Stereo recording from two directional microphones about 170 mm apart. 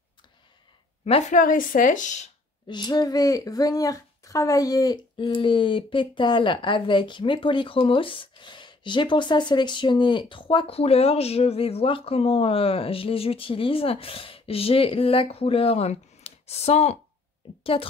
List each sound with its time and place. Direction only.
1.0 s speech: 35° left (ahead or behind)
1.4 s speech: 55° left (ahead or behind)
2.7 s speech: 25° left (ahead or behind)